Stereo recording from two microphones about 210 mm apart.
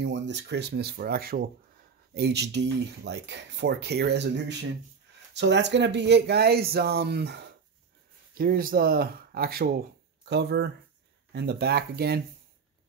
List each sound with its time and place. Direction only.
0.0 s speech: 55° right (ahead or behind)